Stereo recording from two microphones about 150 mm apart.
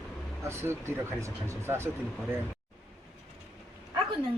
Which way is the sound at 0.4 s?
15° right (ahead or behind).